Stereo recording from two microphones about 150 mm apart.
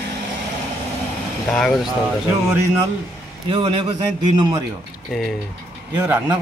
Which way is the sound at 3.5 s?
35° right (ahead or behind).